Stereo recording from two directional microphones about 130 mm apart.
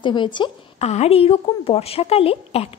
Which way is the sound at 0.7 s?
60° left (ahead or behind).